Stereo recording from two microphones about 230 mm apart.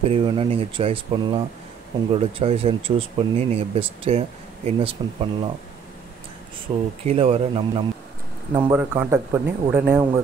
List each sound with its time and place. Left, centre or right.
0.1 s speech: right
6.7 s speech: right
8.5 s speech: centre